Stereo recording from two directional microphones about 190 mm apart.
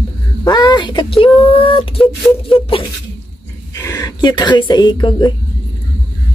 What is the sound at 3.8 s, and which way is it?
Speech, 20° left (ahead or behind).